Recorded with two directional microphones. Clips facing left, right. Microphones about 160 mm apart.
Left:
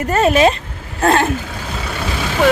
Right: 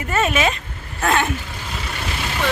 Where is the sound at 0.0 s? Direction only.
40° left (ahead or behind).